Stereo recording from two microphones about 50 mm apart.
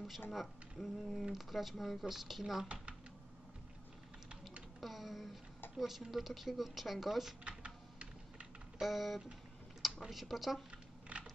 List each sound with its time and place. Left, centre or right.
0.3 s speech: centre
4.7 s a sound: centre
5.8 s speech: centre
7.4 s typing: right
8.7 s speech: centre
11.1 s a sound: right